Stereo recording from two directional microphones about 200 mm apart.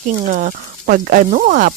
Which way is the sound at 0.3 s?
40° right (ahead or behind).